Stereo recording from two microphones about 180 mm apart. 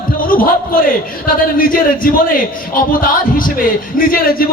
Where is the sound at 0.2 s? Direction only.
50° left (ahead or behind).